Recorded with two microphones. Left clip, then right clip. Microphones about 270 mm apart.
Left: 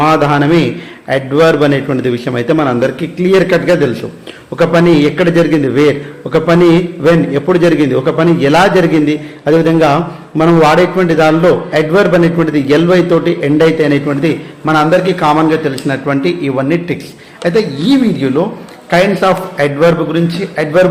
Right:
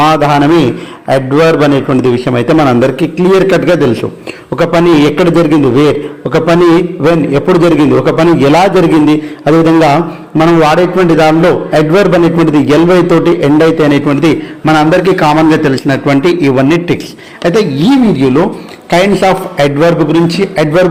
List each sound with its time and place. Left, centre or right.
0.0 s a man's voice: centre; by 20.8 s right